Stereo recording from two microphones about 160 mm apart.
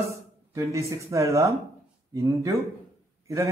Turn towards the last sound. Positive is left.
turn(degrees=-20)  # may be behind; listen again after turning